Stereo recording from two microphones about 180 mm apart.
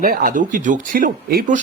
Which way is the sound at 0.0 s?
50° right (ahead or behind).